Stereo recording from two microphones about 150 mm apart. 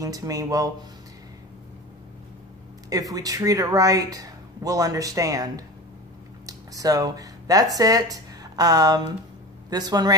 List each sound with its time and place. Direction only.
0.0 s speech: 25° right (ahead or behind)
2.9 s speech: 25° right (ahead or behind)